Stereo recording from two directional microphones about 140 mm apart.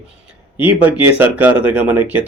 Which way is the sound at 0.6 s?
10° right (ahead or behind).